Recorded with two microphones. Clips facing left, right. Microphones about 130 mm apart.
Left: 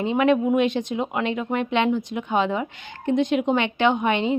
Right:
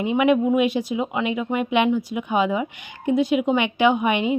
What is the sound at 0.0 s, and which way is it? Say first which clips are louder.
A woman's voice: right 1 dB; 15° right (ahead or behind).